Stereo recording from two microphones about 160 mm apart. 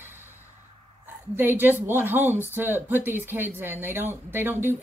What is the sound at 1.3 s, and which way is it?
Speech, 15° right (ahead or behind).